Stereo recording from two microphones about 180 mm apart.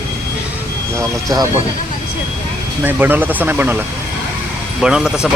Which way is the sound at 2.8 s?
10° right (ahead or behind).